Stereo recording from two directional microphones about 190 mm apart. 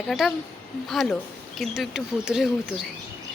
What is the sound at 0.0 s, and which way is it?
Speech, 5° left (ahead or behind).